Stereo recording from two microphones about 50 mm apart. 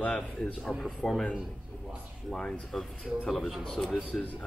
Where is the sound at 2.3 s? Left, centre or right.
Centre.